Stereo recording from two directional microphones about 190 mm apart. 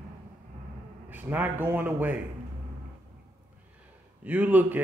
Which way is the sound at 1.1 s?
10° right (ahead or behind).